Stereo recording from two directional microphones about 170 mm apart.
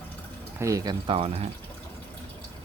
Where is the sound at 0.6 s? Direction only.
20° right (ahead or behind).